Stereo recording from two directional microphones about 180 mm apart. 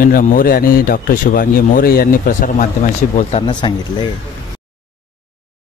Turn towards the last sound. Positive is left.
turn(degrees=25)  # may be behind; listen again after turning